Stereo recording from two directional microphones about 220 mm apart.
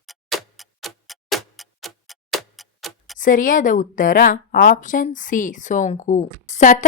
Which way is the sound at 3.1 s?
35° left (ahead or behind).